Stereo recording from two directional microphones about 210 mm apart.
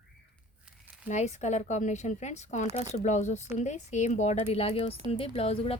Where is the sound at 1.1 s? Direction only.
35° left (ahead or behind).